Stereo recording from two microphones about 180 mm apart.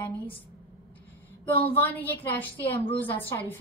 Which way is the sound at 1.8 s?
10° left (ahead or behind).